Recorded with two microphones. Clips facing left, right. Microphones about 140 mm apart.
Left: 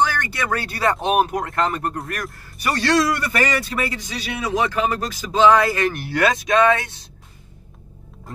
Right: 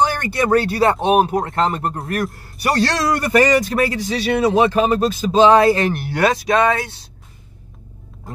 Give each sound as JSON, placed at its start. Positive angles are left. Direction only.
{"t": 0.0, "sound": "speech", "side_deg": -25}